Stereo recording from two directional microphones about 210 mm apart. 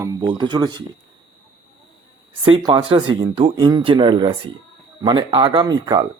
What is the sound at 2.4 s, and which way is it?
Speech, 25° right (ahead or behind).